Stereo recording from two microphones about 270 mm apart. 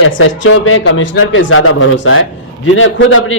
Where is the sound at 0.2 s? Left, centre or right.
Left.